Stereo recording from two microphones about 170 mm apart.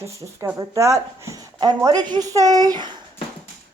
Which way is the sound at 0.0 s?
15° right (ahead or behind).